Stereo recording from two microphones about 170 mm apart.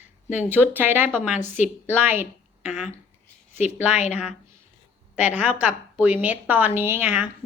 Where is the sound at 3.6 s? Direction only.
45° left (ahead or behind).